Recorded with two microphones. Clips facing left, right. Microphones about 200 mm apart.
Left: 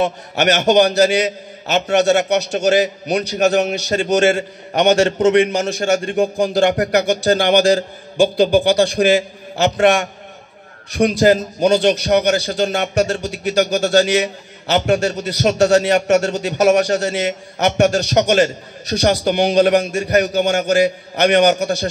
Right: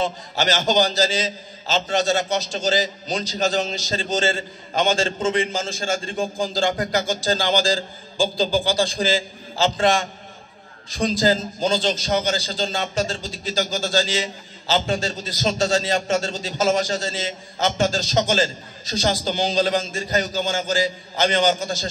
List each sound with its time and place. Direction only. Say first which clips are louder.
0.0 s a man's voice: left 6 dB; 65° left (ahead or behind)